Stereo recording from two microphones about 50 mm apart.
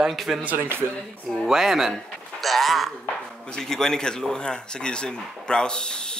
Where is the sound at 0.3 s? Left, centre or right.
Centre.